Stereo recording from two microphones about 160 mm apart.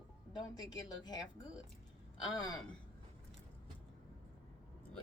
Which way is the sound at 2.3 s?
25° left (ahead or behind).